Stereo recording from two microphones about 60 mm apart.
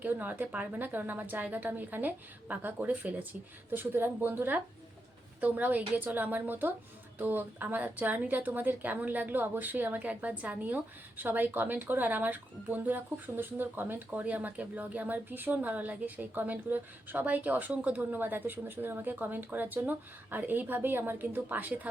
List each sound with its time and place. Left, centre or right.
0.0 s a woman's voice: right